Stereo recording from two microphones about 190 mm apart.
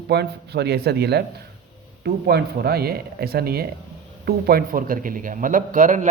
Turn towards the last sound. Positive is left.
turn(degrees=-40)  # may be behind; listen again after turning